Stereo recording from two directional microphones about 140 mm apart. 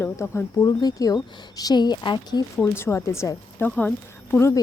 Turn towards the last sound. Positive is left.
turn(degrees=20)  # may be behind; listen again after turning